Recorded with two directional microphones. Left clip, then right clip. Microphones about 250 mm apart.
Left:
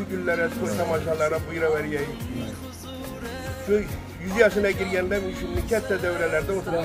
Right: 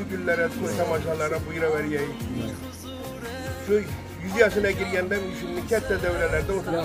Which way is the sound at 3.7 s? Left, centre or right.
Centre.